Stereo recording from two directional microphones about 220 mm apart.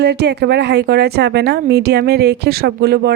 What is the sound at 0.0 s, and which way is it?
A woman's voice, 45° right (ahead or behind).